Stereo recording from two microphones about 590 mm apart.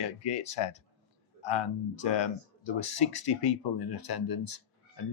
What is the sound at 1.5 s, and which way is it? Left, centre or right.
Speech, centre.